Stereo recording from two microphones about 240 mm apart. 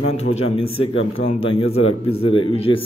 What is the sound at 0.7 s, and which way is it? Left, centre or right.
Speech, left.